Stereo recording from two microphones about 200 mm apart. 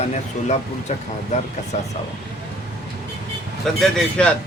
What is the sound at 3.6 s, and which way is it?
Speech, 5° left (ahead or behind).